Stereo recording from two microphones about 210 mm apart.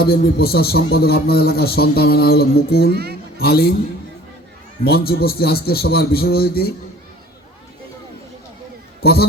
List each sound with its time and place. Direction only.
0.0 s a man's voice: 45° left (ahead or behind)
2.9 s speech: 50° right (ahead or behind)
3.3 s a man's voice: 50° left (ahead or behind)
4.8 s a man's voice: 45° left (ahead or behind)